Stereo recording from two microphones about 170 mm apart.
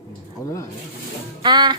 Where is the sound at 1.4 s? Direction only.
25° right (ahead or behind).